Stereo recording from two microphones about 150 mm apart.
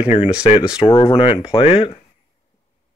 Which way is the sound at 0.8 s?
35° left (ahead or behind).